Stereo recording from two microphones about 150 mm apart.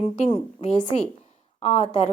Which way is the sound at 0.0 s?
45° left (ahead or behind).